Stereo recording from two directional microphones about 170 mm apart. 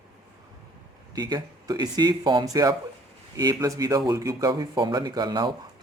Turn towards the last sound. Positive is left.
turn(degrees=-25)  # may be behind; listen again after turning